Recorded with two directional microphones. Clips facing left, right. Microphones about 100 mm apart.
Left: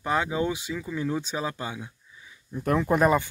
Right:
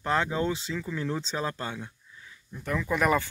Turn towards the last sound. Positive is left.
turn(degrees=20)  # may be behind; listen again after turning